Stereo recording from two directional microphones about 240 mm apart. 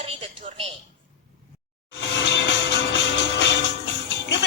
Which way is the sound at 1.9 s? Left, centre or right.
Left.